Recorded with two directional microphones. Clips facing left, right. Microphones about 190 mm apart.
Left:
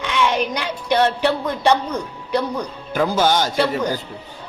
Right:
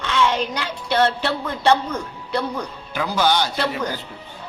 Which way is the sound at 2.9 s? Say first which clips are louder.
Left 3 dB; 45° left (ahead or behind).